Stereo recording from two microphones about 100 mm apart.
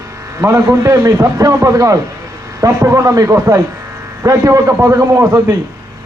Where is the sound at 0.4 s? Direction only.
35° right (ahead or behind).